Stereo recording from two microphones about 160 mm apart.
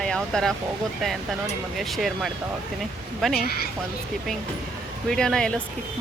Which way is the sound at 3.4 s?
75° left (ahead or behind).